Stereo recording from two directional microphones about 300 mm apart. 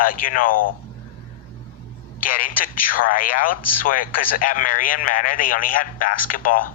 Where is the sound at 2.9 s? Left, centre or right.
Left.